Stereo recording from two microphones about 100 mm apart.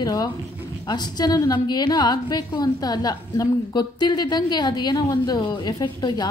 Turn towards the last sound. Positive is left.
turn(degrees=45)  # may be behind; listen again after turning